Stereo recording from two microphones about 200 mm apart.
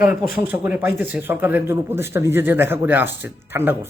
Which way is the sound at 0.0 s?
5° right (ahead or behind).